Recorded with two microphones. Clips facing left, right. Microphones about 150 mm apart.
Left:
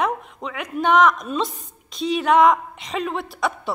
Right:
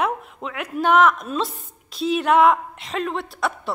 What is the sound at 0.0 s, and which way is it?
A woman's voice, 5° right (ahead or behind).